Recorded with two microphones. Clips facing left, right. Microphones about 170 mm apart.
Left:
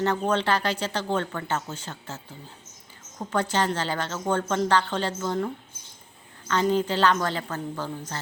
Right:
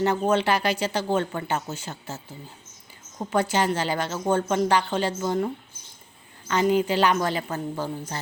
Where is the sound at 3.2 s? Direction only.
10° right (ahead or behind).